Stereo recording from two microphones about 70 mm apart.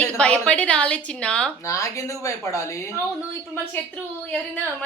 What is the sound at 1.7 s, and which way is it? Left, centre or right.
Speech, left.